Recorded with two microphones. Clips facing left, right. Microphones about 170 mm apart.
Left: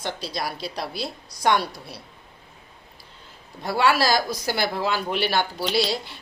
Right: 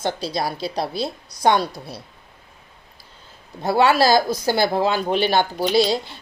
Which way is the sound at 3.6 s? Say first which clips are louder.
Right 5 dB; 25° right (ahead or behind).